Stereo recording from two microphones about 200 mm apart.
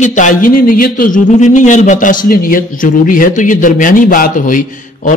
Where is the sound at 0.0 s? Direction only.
40° left (ahead or behind).